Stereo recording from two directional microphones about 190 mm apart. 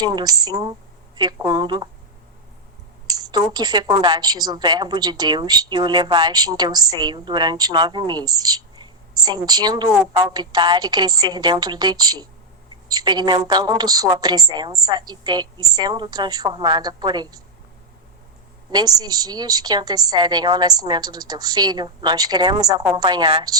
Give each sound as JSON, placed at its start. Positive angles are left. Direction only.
{"t": 0.0, "sound": "a woman's voice", "side_deg": -20}
{"t": 3.1, "sound": "a woman's voice", "side_deg": -20}
{"t": 18.7, "sound": "a woman's voice", "side_deg": -20}